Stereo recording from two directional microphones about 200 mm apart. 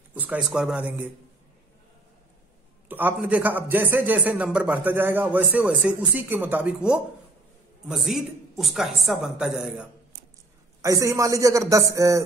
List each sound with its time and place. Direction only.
0.1 s a man's voice: 10° right (ahead or behind)
2.9 s a man's voice: 10° right (ahead or behind)
10.8 s a man's voice: 15° right (ahead or behind)